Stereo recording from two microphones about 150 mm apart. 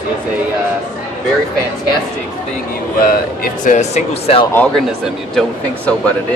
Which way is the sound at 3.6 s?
50° left (ahead or behind).